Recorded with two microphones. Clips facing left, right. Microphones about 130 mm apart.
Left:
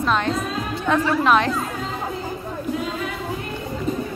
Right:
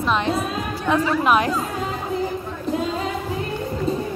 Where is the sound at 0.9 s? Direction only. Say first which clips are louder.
Even; 10° right (ahead or behind).